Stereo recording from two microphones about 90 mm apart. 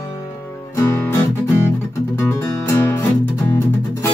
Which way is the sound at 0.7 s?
30° left (ahead or behind).